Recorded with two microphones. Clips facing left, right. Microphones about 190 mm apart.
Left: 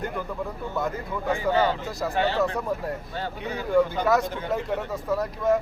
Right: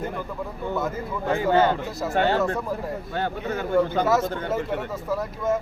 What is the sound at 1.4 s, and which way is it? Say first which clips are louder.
Speech: right 4 dB; 55° right (ahead or behind).